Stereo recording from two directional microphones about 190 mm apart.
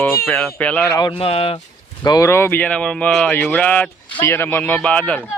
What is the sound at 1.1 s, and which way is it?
Speech, 30° left (ahead or behind).